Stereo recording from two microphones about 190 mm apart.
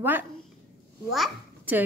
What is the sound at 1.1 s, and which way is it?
Speech, centre (ahead or behind).